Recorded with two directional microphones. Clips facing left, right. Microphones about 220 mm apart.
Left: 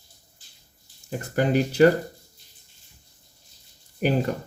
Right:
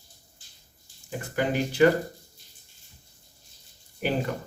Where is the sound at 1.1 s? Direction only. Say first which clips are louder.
Left 4 dB; 40° left (ahead or behind).